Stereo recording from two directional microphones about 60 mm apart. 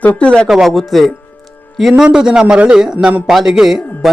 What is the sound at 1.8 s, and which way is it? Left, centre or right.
Speech, centre.